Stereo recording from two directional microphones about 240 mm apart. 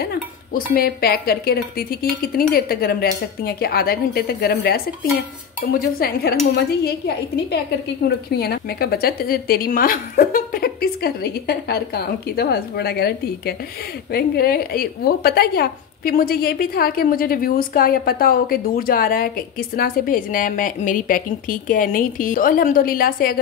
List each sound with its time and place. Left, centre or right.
0.0 s a woman's voice: left
8.3 s a woman's voice: left